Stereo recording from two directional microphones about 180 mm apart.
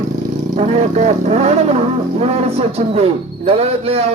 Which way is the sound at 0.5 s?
40° right (ahead or behind).